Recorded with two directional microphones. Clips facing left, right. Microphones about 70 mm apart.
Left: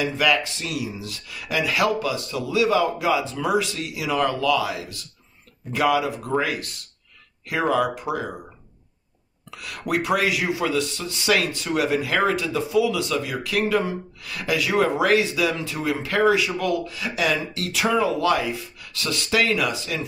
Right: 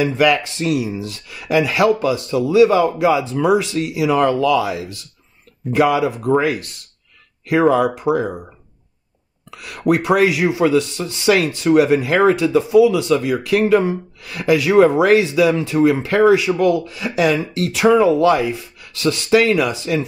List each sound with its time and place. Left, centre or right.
0.0 s speech: right
9.6 s speech: right